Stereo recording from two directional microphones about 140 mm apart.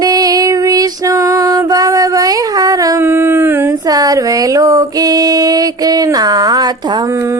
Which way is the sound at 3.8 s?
25° right (ahead or behind).